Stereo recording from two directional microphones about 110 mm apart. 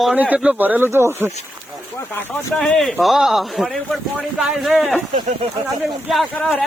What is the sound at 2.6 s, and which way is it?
Speech, 5° left (ahead or behind).